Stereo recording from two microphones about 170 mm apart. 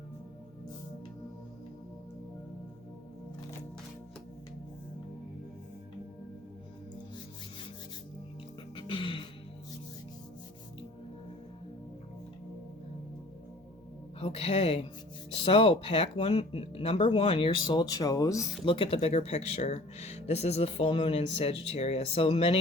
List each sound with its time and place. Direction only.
8.7 s music: 30° left (ahead or behind)
14.2 s a woman's voice: 35° left (ahead or behind); by 18.4 s 20° left (ahead or behind)
18.6 s speech: 30° left (ahead or behind)